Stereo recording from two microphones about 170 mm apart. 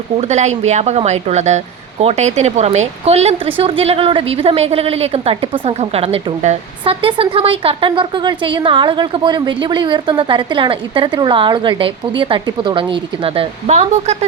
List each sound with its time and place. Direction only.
0.2 s speech: 40° right (ahead or behind)